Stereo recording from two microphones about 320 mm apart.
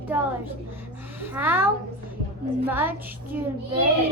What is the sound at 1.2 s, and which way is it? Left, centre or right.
Speech, centre.